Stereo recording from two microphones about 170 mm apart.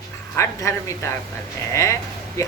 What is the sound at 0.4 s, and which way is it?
Speech, 15° left (ahead or behind).